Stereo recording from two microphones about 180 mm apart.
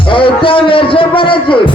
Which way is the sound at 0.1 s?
30° left (ahead or behind).